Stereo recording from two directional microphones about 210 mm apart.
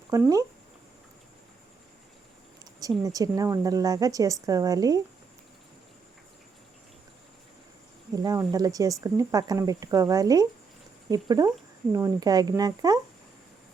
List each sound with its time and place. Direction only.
0.1 s speech: 15° right (ahead or behind)
3.0 s speech: 15° right (ahead or behind)
8.1 s speech: 15° right (ahead or behind)